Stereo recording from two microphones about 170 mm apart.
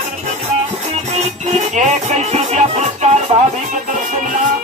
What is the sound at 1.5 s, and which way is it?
Music, 45° right (ahead or behind).